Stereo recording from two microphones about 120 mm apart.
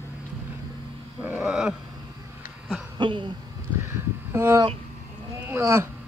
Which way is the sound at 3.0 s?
40° right (ahead or behind).